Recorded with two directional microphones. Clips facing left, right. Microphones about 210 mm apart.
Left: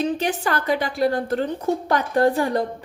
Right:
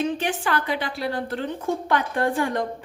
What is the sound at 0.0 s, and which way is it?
A woman's voice, 40° left (ahead or behind).